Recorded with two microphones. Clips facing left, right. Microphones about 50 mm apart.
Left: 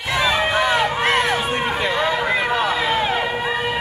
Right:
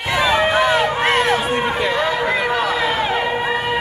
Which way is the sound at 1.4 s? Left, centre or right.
Right.